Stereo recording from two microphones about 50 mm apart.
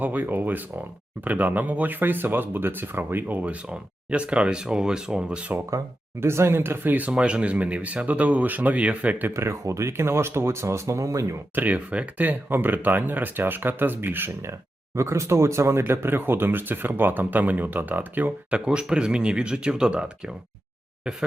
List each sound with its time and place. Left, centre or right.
0.0 s speech: right
3.3 s speech: right
5.7 s speech: right
7.1 s speech: right
9.3 s speech: right
11.5 s speech: right
14.9 s speech: right
15.8 s speech: right
18.5 s speech: centre